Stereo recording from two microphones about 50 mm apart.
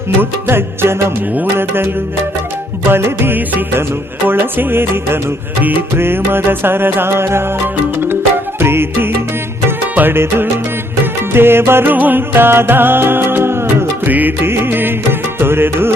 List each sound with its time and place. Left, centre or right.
0.2 s music: right
2.9 s music: right
10.1 s music: right
11.9 s music: right
12.3 s music: right
14.0 s music: right
14.4 s music: right